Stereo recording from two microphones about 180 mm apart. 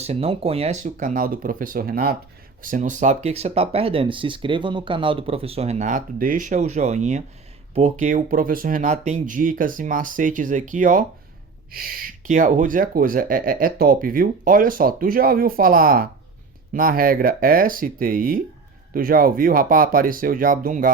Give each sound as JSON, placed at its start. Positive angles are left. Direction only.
{"t": 0.0, "sound": "speech", "side_deg": -35}